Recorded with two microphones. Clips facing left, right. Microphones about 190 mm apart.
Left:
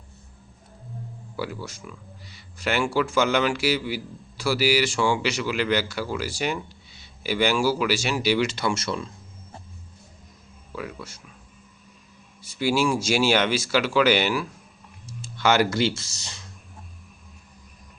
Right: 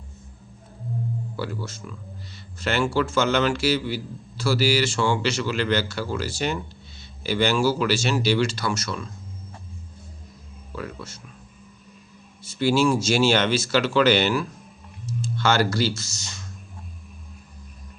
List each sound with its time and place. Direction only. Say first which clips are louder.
1.4 s speech: left 3 dB; 10° left (ahead or behind); by 9.0 s 30° left (ahead or behind)
10.8 s speech: even; 10° left (ahead or behind)
12.5 s speech: right 3 dB; 10° left (ahead or behind); by 16.4 s 30° left (ahead or behind)